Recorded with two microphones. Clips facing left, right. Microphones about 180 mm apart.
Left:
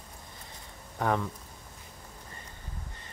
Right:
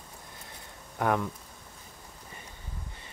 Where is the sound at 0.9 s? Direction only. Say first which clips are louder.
Right 1 dB; 5° right (ahead or behind).